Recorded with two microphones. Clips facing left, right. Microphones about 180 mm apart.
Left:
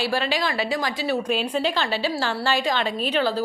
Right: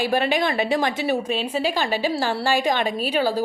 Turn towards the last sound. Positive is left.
turn(degrees=-10)  # may be behind; listen again after turning